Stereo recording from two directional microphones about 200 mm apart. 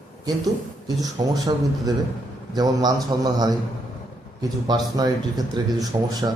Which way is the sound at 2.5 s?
20° right (ahead or behind).